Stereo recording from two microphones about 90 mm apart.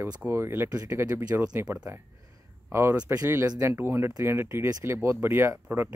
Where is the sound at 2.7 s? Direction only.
30° right (ahead or behind).